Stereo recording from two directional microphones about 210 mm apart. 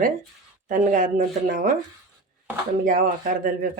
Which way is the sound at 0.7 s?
40° right (ahead or behind).